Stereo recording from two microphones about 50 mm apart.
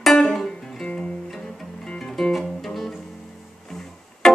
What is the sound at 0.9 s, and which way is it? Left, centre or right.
Music, left.